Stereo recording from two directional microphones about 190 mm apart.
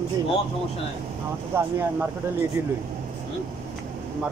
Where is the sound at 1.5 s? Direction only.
10° right (ahead or behind).